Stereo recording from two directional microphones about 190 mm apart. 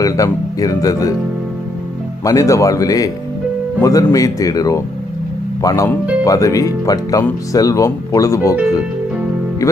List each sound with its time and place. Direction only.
0.0 s speech: 20° left (ahead or behind)
2.2 s speech: 15° left (ahead or behind)